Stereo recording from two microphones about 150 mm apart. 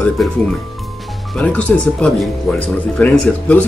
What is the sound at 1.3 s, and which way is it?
Speech, 10° left (ahead or behind).